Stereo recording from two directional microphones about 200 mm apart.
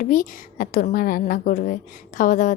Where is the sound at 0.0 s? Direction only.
40° left (ahead or behind).